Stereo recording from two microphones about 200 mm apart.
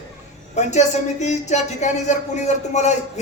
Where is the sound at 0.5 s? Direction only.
35° left (ahead or behind).